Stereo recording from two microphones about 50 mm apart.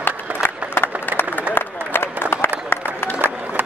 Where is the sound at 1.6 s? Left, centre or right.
Left.